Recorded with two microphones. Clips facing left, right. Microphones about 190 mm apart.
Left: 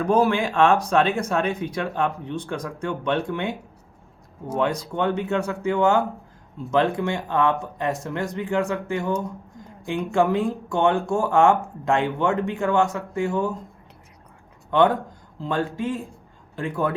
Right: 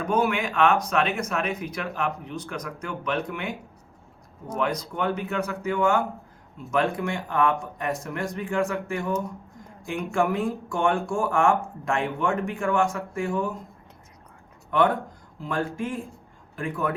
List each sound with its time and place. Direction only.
0.1 s speech: 35° left (ahead or behind)
4.5 s speech: 25° left (ahead or behind)
15.4 s speech: 25° left (ahead or behind)